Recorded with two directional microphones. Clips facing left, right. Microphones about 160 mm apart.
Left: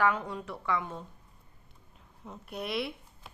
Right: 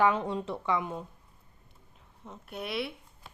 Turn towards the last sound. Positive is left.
turn(degrees=0)  # may be behind; listen again after turning